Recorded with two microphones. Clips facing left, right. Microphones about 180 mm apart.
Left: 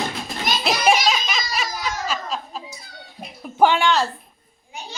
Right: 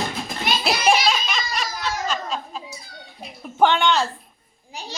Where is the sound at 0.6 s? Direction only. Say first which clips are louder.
Left 1 dB; centre (ahead or behind).